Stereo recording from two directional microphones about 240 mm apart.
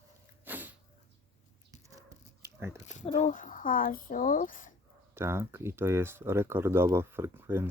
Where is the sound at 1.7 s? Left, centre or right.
Centre.